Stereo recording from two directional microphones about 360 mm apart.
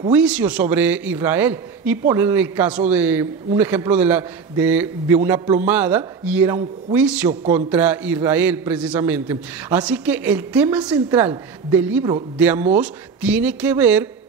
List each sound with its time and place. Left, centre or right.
0.0 s a man's voice: centre